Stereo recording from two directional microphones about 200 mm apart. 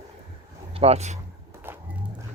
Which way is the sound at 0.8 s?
30° right (ahead or behind).